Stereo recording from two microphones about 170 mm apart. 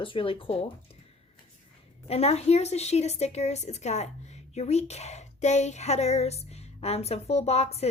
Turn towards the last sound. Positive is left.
turn(degrees=40)  # may be behind; listen again after turning